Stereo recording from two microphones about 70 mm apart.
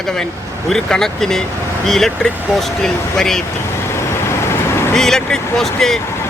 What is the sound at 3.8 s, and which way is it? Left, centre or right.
Vehicle, left.